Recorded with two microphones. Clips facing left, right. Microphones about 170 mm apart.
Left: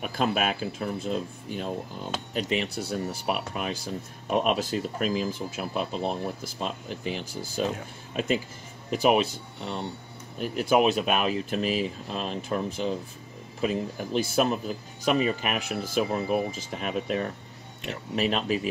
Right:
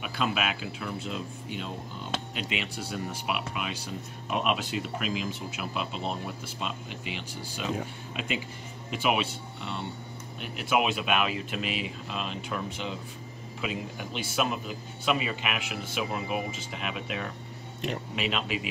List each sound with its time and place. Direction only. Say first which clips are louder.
0.0 s speech: left 4 dB; 45° left (ahead or behind)